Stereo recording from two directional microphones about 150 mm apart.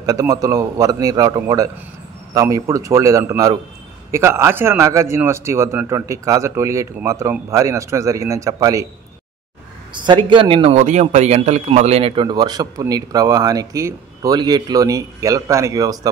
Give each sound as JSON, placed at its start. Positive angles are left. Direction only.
{"t": 0.0, "sound": "a man's voice", "side_deg": -25}
{"t": 9.9, "sound": "a man's voice", "side_deg": -30}